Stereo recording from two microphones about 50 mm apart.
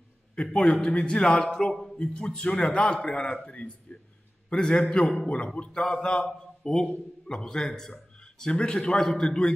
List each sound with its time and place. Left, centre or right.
0.4 s a man's voice: centre